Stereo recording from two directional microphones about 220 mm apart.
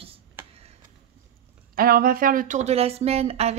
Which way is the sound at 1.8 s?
40° right (ahead or behind).